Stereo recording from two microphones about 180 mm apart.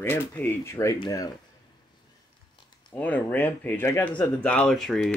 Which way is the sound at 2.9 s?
10° left (ahead or behind).